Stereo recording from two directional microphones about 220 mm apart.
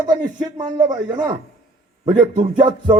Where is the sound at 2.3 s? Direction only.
35° right (ahead or behind).